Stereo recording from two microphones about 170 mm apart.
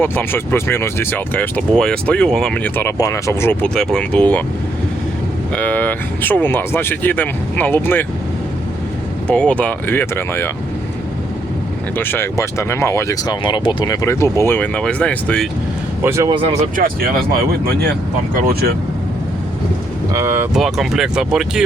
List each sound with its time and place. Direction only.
0.0 s speech: 10° left (ahead or behind)
5.5 s speech: 10° left (ahead or behind)
9.2 s speech: 5° left (ahead or behind)
11.9 s speech: 10° left (ahead or behind)
13.4 s speech: 30° left (ahead or behind); by 15.4 s 5° left (ahead or behind)
16.0 s speech: 15° right (ahead or behind)
16.3 s speech: 30° right (ahead or behind)
16.8 s speech: 60° right (ahead or behind)
20.1 s speech: 15° right (ahead or behind)
20.5 s speech: centre (ahead or behind)